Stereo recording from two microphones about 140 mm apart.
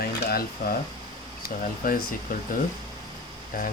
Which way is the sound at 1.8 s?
85° left.